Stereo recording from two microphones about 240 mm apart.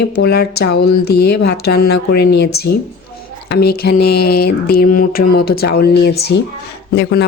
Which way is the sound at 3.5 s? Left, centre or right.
Left.